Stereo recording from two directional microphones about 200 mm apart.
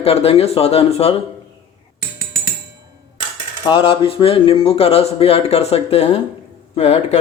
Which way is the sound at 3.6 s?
25° left (ahead or behind).